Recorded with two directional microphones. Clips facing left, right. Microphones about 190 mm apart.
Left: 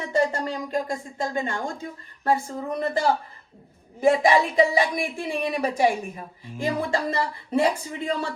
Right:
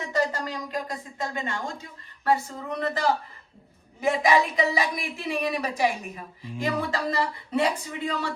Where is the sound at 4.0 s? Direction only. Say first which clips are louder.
Left 3 dB; 30° left (ahead or behind).